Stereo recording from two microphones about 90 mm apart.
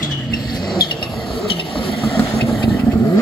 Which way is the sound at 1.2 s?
80° left.